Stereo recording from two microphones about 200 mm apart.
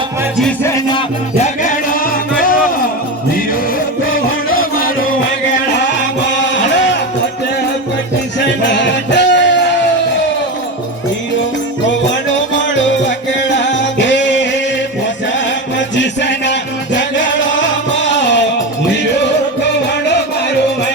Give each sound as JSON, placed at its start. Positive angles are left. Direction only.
{"t": 0.4, "sound": "music", "side_deg": 10}
{"t": 0.9, "sound": "music", "side_deg": 35}
{"t": 4.1, "sound": "music", "side_deg": 45}
{"t": 8.4, "sound": "music", "side_deg": 60}
{"t": 14.0, "sound": "music", "side_deg": 60}
{"t": 16.0, "sound": "music", "side_deg": 60}